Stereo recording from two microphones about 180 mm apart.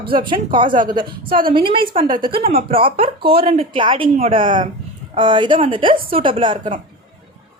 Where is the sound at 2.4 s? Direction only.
55° right (ahead or behind).